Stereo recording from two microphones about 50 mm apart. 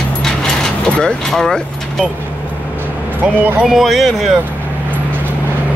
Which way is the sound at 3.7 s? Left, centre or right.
Centre.